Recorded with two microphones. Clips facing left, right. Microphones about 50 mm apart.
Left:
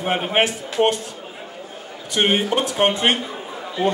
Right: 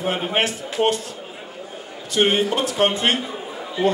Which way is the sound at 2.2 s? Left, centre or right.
Centre.